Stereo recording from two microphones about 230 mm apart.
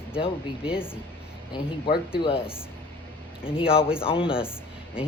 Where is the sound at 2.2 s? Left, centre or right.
Left.